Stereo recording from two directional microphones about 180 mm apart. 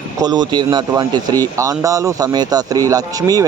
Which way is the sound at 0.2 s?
25° right (ahead or behind).